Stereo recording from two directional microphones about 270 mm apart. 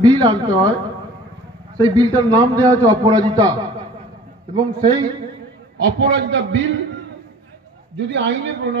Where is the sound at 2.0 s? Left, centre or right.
Centre.